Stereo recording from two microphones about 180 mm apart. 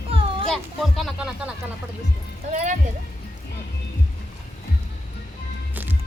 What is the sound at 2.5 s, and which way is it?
Speech, 40° right (ahead or behind).